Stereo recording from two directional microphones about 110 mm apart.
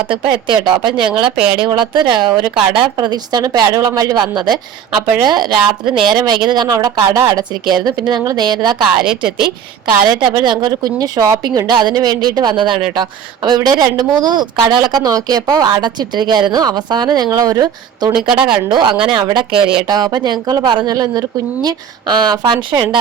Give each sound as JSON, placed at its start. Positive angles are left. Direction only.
{"t": 0.1, "sound": "speech", "side_deg": -45}
{"t": 10.1, "sound": "speech", "side_deg": -40}
{"t": 11.7, "sound": "speech", "side_deg": -40}
{"t": 18.1, "sound": "a woman's voice", "side_deg": -5}
{"t": 18.7, "sound": "speech", "side_deg": -45}
{"t": 19.9, "sound": "speech", "side_deg": -40}